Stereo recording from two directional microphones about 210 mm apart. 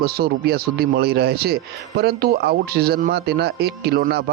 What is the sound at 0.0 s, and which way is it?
Speech, 50° right (ahead or behind).